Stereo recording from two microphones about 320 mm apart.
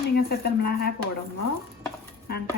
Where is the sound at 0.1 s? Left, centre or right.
Left.